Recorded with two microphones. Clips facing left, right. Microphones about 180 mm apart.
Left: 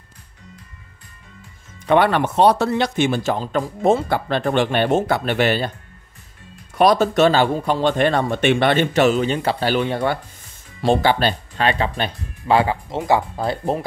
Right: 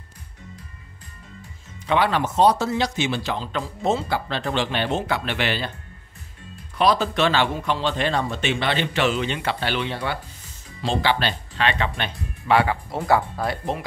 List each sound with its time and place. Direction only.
1.9 s speech: 55° left (ahead or behind)
6.7 s speech: 45° left (ahead or behind); by 13.6 s 20° left (ahead or behind)